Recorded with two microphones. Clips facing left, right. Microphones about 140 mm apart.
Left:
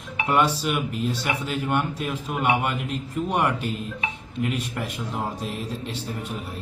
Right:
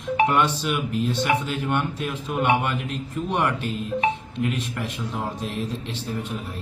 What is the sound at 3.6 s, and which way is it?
Speech, 45° right (ahead or behind).